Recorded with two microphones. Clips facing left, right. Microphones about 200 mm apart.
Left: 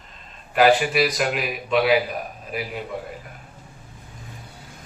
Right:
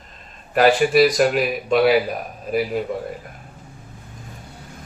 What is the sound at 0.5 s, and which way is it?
A man's voice, 45° right (ahead or behind).